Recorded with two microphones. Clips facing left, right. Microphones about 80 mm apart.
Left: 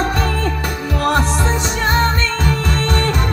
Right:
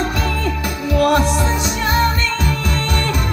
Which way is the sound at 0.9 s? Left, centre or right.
Left.